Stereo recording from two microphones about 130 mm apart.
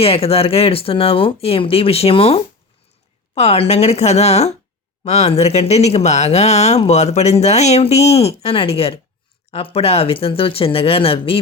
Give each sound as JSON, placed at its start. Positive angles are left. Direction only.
{"t": 0.0, "sound": "speech", "side_deg": 50}